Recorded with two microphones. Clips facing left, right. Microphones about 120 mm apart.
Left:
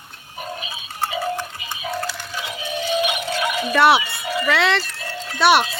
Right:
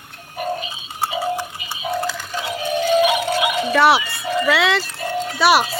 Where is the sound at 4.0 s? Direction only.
25° left (ahead or behind).